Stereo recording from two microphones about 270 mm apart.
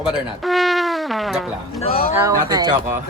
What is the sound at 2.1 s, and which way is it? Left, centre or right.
Speech, centre.